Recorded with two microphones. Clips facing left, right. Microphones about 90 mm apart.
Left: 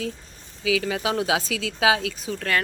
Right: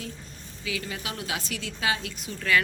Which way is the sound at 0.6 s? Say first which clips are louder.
Left 10 dB; 90° left.